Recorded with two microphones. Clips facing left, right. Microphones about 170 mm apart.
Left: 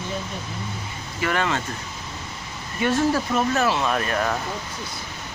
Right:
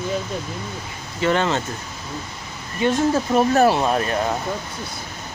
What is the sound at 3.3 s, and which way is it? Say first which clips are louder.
Speech: right 6 dB; 35° right (ahead or behind).